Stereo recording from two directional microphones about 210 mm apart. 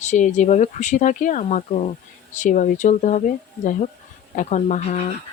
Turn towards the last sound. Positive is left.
turn(degrees=35)  # may be behind; listen again after turning